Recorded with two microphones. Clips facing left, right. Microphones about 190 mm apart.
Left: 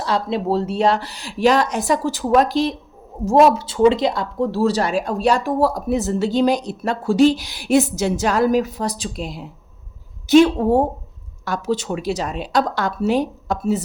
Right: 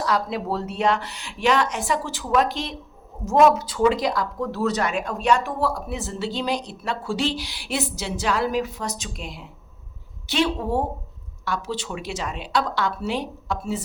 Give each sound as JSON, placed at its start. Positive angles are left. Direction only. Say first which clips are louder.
{"t": 0.0, "sound": "a woman's voice", "louder": "left 3 dB", "side_deg": 25}